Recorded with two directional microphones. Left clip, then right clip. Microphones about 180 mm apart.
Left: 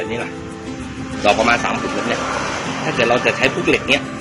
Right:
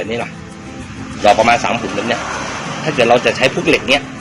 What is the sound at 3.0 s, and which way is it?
Speech, 55° right (ahead or behind).